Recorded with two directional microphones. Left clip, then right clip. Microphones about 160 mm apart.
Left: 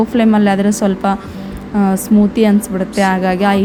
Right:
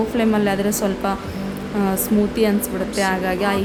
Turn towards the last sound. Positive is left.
turn(degrees=30)  # may be behind; listen again after turning